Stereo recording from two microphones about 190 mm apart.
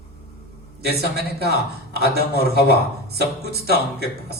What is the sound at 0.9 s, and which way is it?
Speech, 55° right (ahead or behind).